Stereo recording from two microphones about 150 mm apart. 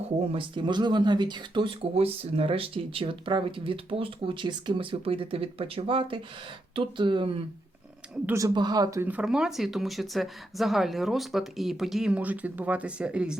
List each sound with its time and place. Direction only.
0.2 s speech: 35° right (ahead or behind)
8.3 s speech: 20° right (ahead or behind); by 13.3 s 5° right (ahead or behind)